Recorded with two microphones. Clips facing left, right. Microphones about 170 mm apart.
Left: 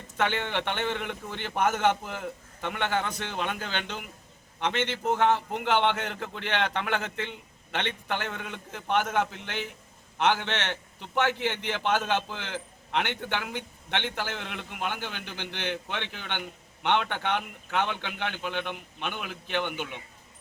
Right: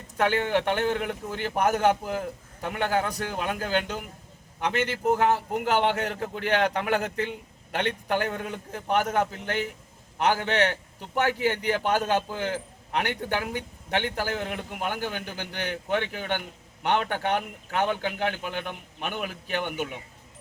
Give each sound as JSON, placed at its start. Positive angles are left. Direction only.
{"t": 0.3, "sound": "a man's voice", "side_deg": -40}
{"t": 5.1, "sound": "a man's voice", "side_deg": -40}